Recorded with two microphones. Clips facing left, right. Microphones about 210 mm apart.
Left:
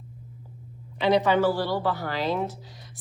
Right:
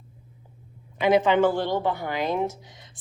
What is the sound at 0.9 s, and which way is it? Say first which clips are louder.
Speech: right 2 dB; 20° right (ahead or behind).